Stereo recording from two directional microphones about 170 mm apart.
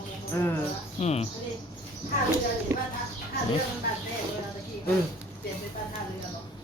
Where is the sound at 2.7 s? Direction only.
15° right (ahead or behind).